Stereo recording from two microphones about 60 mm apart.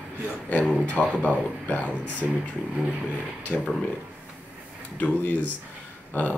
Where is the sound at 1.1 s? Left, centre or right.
Left.